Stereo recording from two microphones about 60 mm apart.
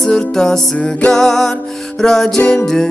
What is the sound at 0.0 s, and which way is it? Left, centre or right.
Music, centre.